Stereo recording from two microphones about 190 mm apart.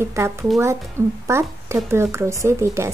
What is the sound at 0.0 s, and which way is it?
Speech, 15° right (ahead or behind).